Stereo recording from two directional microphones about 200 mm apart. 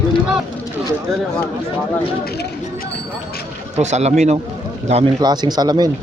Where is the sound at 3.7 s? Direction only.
35° right (ahead or behind).